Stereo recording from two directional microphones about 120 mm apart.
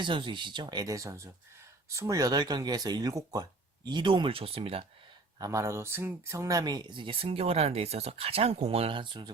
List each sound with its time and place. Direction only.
0.0 s speech: 45° right (ahead or behind)
3.8 s speech: 40° right (ahead or behind)
5.4 s speech: 25° right (ahead or behind); by 9.3 s 40° right (ahead or behind)